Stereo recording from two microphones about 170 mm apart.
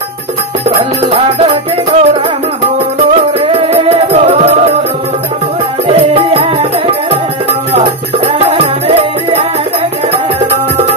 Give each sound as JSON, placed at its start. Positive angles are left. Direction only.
{"t": 1.1, "sound": "music", "side_deg": -40}
{"t": 3.3, "sound": "music", "side_deg": -35}
{"t": 5.9, "sound": "music", "side_deg": -35}
{"t": 8.3, "sound": "music", "side_deg": -35}